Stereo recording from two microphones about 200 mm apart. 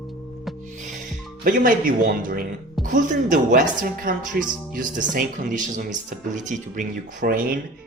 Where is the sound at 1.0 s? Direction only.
40° right (ahead or behind).